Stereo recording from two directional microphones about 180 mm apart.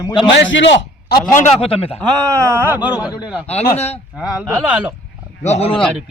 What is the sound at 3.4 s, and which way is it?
Speech, 35° left (ahead or behind).